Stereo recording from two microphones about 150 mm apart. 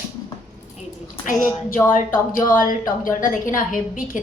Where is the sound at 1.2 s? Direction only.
65° left (ahead or behind).